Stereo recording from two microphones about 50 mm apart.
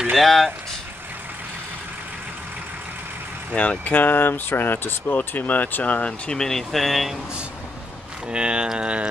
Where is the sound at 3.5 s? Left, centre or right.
Left.